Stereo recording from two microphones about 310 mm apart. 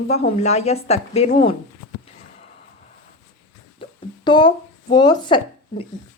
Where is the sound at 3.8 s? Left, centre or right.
Centre.